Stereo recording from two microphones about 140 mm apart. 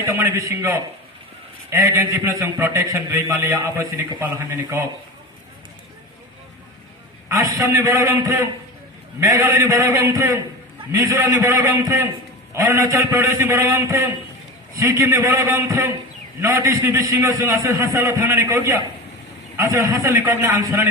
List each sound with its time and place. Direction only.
0.0 s a man's voice: 20° right (ahead or behind)
7.3 s a man's voice: 20° right (ahead or behind)